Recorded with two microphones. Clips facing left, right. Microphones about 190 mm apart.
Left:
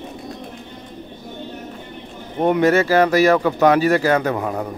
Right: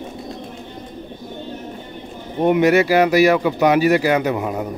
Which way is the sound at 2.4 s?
15° right (ahead or behind).